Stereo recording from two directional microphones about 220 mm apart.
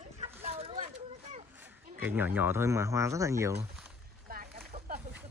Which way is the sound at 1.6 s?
10° right (ahead or behind).